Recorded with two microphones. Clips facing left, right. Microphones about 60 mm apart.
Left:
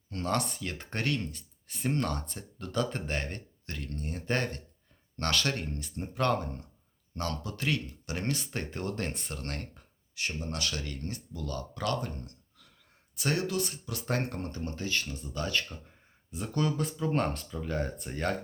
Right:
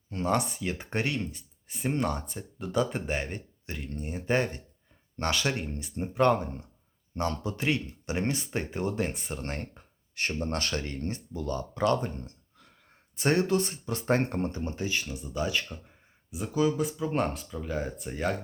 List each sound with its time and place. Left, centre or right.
0.1 s speech: centre
10.2 s speech: right; by 18.3 s centre